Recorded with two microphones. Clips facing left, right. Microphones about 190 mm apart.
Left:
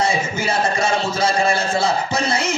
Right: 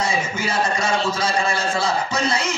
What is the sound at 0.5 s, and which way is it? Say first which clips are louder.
A man's voice: left 2 dB; 30° left (ahead or behind).